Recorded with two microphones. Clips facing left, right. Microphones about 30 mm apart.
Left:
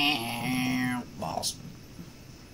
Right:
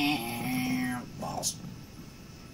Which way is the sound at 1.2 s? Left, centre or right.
Left.